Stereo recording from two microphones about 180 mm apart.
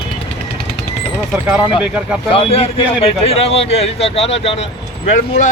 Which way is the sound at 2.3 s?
30° left (ahead or behind).